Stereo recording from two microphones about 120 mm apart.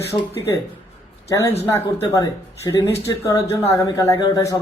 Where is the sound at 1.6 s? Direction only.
20° left (ahead or behind).